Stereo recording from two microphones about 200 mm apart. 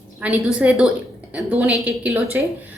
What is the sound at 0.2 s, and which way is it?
Speech, 5° right (ahead or behind).